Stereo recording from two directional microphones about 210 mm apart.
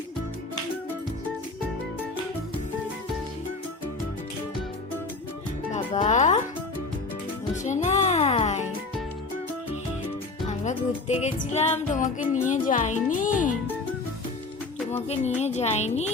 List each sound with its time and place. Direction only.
5.7 s music: 35° left (ahead or behind)
7.5 s music: 35° left (ahead or behind)
10.5 s music: 35° left (ahead or behind)
15.4 s music: 30° left (ahead or behind)